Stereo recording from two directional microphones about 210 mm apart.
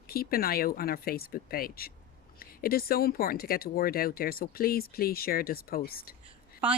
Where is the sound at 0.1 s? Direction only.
45° left (ahead or behind).